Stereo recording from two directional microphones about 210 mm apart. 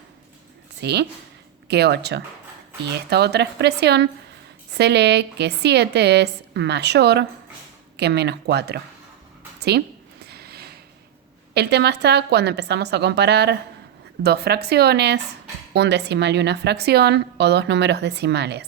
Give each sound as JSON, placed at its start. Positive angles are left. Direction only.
{"t": 0.8, "sound": "a woman's voice", "side_deg": -50}
{"t": 9.6, "sound": "a sound", "side_deg": -50}
{"t": 11.5, "sound": "a woman's voice", "side_deg": -55}